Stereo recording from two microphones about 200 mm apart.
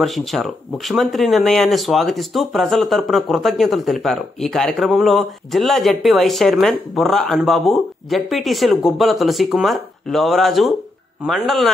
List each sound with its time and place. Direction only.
0.0 s speech: centre (ahead or behind)